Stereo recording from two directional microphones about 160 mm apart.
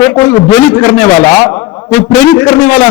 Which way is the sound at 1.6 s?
25° left (ahead or behind).